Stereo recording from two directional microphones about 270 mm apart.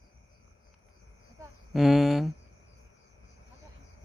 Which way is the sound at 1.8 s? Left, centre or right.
Centre.